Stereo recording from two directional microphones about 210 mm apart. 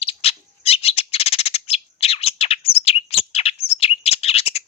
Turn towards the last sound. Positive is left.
turn(degrees=30)  # may be behind; listen again after turning